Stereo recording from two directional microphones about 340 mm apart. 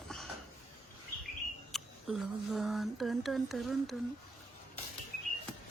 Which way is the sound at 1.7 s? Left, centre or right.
Centre.